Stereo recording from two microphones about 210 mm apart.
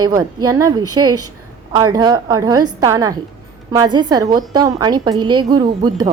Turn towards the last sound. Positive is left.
turn(degrees=-20)  # may be behind; listen again after turning